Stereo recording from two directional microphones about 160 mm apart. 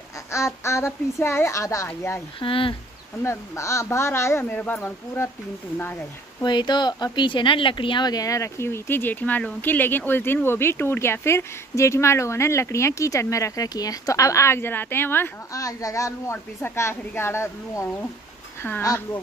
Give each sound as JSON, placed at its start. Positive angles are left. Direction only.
{"t": 0.3, "sound": "speech", "side_deg": 15}
{"t": 2.4, "sound": "speech", "side_deg": 35}
{"t": 3.2, "sound": "speech", "side_deg": 15}
{"t": 6.4, "sound": "speech", "side_deg": 25}